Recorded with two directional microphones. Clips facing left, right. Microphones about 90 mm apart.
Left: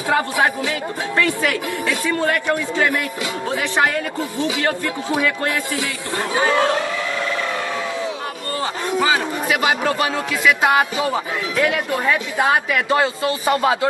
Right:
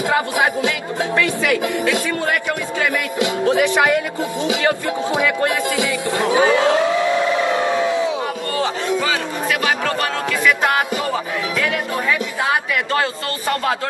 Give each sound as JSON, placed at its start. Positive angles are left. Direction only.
{"t": 5.1, "sound": "speech", "side_deg": -20}
{"t": 9.0, "sound": "speech", "side_deg": 15}